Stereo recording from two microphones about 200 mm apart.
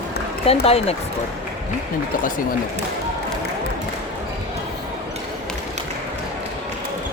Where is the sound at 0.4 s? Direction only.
30° left (ahead or behind).